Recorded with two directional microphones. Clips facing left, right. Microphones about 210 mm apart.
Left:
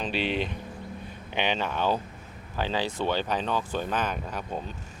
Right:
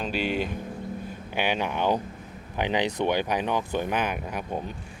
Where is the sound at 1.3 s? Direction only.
10° right (ahead or behind).